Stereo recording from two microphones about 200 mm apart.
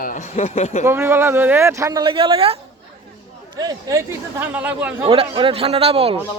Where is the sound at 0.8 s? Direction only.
10° right (ahead or behind).